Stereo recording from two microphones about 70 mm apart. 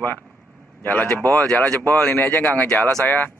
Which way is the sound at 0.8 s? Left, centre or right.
Left.